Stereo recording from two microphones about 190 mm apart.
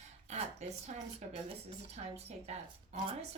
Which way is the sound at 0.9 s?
35° right (ahead or behind).